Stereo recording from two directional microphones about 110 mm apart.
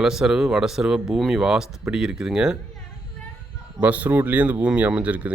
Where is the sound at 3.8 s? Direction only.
15° right (ahead or behind).